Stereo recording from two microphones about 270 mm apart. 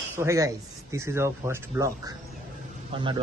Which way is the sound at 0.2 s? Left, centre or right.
Centre.